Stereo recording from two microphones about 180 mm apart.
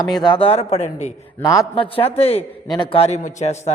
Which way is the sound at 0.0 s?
25° left (ahead or behind).